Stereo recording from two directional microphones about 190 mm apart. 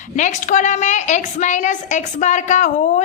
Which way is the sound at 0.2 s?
40° left (ahead or behind).